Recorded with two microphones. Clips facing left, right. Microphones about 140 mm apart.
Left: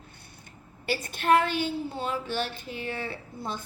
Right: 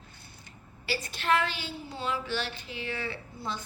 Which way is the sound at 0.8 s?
50° left (ahead or behind).